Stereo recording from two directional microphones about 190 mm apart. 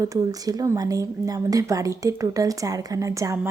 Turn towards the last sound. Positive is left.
turn(degrees=-15)  # may be behind; listen again after turning